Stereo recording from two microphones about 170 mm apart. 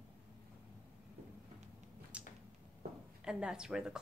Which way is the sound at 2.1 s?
5° right (ahead or behind).